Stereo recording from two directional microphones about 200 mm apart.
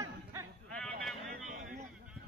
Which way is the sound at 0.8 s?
5° left (ahead or behind).